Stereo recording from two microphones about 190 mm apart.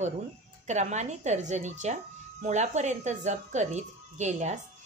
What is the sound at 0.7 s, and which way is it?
A woman's voice, 40° right (ahead or behind).